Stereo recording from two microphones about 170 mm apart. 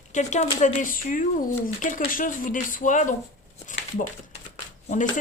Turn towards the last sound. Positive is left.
turn(degrees=50)  # may be behind; listen again after turning